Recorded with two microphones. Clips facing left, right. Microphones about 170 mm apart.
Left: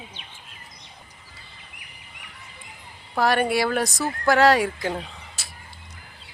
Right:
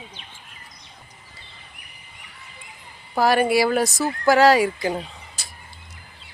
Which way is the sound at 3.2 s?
5° right (ahead or behind).